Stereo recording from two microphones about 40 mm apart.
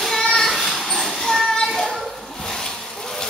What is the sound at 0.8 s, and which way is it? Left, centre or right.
Children playing, centre.